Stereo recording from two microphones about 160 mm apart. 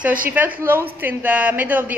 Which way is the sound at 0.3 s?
10° right (ahead or behind).